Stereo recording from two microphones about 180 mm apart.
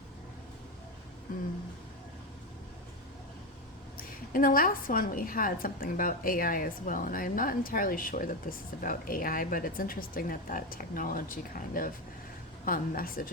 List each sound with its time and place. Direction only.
3.9 s a woman's voice: 50° left (ahead or behind)